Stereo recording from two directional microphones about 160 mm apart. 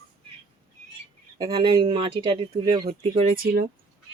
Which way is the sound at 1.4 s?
30° right (ahead or behind).